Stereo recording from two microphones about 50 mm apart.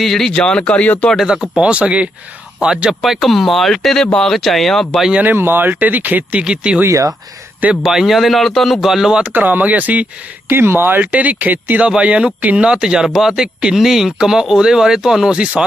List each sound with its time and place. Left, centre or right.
0.0 s speech: centre
0.3 s speech: left
1.5 s speech: right
3.0 s speech: centre
4.4 s speech: centre
5.2 s speech: right
6.4 s speech: centre
7.8 s speech: centre
9.3 s speech: right
10.5 s speech: right
11.9 s speech: right
12.6 s speech: centre